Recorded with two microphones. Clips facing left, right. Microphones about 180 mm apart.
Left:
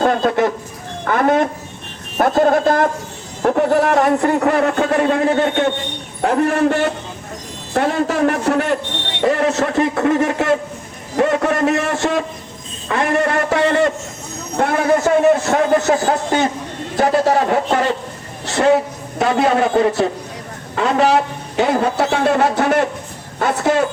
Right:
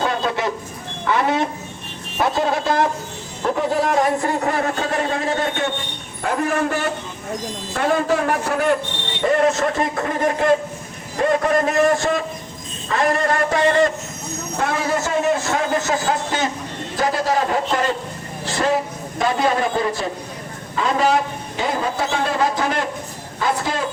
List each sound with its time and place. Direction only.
0.0 s speech: 50° left (ahead or behind)
1.0 s a sound: 50° left (ahead or behind)
2.1 s a man's voice: 50° left (ahead or behind)